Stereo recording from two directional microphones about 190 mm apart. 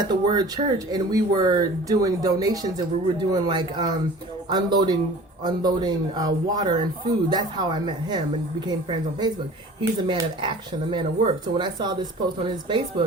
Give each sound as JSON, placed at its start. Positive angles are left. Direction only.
{"t": 0.0, "sound": "speech", "side_deg": -20}